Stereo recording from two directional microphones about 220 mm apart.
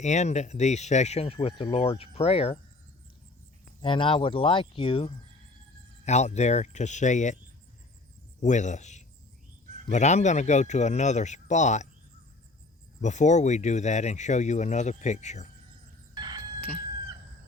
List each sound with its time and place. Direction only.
0.0 s speech: 30° left (ahead or behind)
3.8 s speech: 25° left (ahead or behind)
8.4 s speech: 35° left (ahead or behind)
13.0 s speech: 30° left (ahead or behind)
16.2 s crowing: 25° right (ahead or behind)